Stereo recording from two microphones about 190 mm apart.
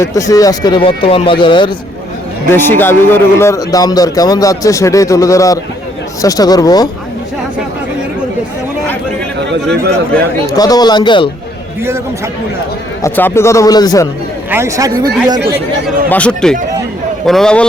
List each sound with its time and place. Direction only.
0.0 s speech: 15° left (ahead or behind)
2.5 s speech: 10° left (ahead or behind)
10.5 s speech: 20° left (ahead or behind)
13.0 s speech: 10° left (ahead or behind)
14.5 s speech: 15° right (ahead or behind)
16.0 s a man's voice: 5° left (ahead or behind)